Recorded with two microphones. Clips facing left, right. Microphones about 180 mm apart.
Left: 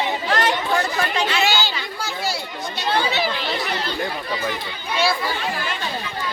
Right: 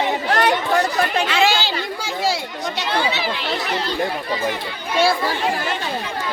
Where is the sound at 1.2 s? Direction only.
90° right.